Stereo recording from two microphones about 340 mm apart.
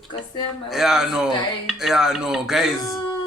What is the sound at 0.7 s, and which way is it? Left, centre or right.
Speech, centre.